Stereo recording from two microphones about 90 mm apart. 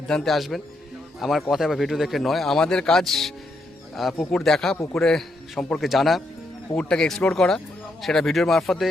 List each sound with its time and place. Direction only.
0.1 s speech: 5° left (ahead or behind)